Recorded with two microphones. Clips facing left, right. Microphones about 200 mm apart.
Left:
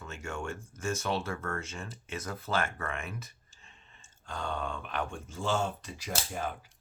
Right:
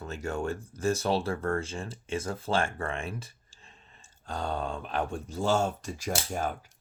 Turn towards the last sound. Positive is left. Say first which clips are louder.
# right 4 dB
turn(degrees=-45)  # may be behind; listen again after turning